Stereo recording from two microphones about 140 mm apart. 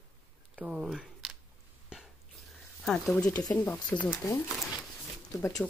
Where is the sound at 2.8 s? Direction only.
5° left (ahead or behind).